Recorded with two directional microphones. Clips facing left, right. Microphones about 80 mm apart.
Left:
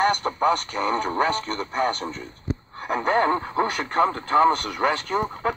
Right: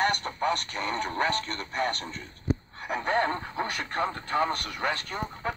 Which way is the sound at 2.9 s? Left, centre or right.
Left.